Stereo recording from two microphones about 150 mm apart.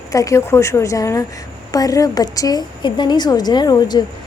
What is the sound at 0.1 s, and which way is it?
A woman's voice, 20° left (ahead or behind).